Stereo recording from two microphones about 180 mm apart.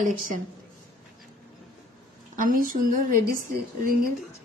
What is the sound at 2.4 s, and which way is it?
A woman's voice, 50° right (ahead or behind).